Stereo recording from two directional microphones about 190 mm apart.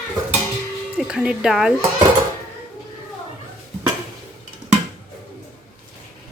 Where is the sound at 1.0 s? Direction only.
5° right (ahead or behind).